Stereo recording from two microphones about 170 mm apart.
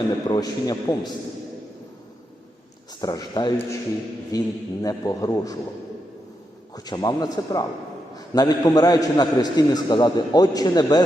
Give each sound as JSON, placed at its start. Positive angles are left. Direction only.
{"t": 0.3, "sound": "a man's voice", "side_deg": 20}
{"t": 3.0, "sound": "a man's voice", "side_deg": 25}
{"t": 6.7, "sound": "a man's voice", "side_deg": 25}